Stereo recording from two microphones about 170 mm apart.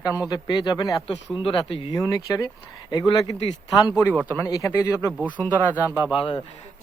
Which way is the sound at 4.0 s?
10° left (ahead or behind).